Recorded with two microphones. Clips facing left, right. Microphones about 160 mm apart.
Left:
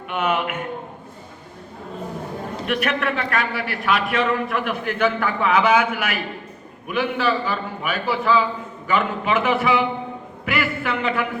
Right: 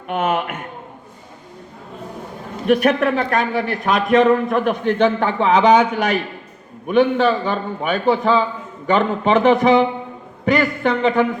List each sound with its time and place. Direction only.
0.1 s a man's voice: 40° right (ahead or behind)
2.6 s a man's voice: 35° right (ahead or behind)